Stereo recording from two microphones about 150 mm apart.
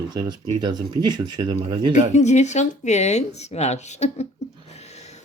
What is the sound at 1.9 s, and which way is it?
Speech, 50° left (ahead or behind).